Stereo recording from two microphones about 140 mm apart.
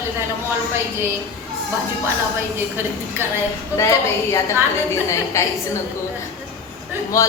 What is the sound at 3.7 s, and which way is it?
A woman's voice, 20° left (ahead or behind).